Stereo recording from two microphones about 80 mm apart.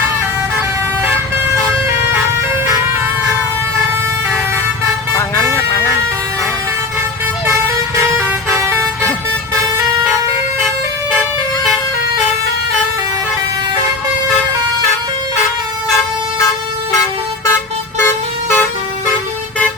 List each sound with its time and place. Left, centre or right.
7.4 s vehicle: right
18.0 s vehicle: left